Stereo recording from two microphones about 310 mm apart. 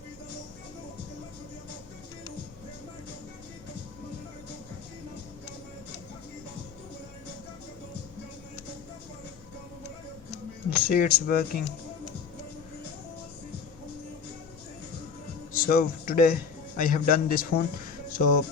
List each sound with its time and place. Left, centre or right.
10.3 s music: left
15.5 s a man's voice: left